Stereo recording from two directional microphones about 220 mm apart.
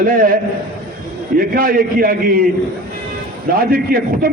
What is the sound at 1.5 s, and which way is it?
Speech, 40° right (ahead or behind).